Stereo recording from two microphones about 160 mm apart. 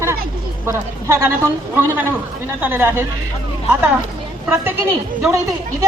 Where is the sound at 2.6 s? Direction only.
10° right (ahead or behind).